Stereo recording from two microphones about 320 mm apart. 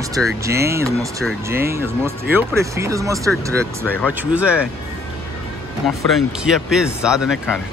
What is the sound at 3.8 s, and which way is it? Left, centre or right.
Speech, centre.